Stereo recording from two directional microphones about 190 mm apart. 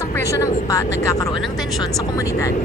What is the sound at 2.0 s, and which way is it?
Speech, 15° left (ahead or behind).